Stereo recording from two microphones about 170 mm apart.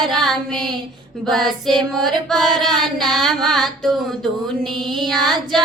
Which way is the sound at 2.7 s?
Centre (ahead or behind).